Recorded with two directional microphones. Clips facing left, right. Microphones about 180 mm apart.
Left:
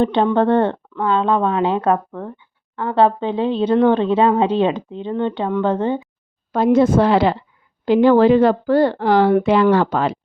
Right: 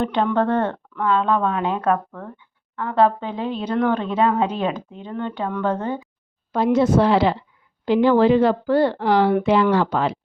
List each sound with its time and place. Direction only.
0.0 s speech: 30° left (ahead or behind)
6.5 s speech: 50° left (ahead or behind)